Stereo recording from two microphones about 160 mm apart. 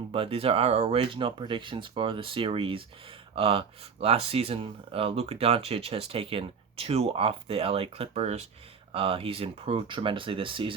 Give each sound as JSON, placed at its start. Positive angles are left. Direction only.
{"t": 0.1, "sound": "speech", "side_deg": -35}